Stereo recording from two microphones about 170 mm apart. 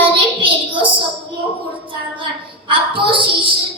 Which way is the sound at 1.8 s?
30° right (ahead or behind).